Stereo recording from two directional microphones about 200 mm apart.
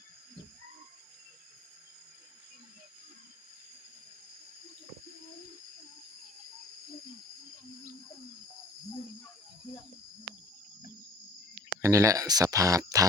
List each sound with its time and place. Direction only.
11.8 s speech: 15° right (ahead or behind)